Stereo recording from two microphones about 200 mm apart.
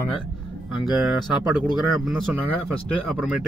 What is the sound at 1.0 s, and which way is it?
Speech, centre (ahead or behind).